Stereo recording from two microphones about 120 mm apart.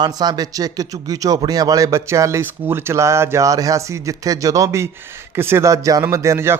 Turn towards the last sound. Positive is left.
turn(degrees=-20)  # may be behind; listen again after turning